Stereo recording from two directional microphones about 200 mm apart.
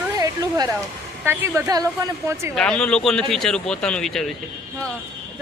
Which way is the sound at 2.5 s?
5° left (ahead or behind).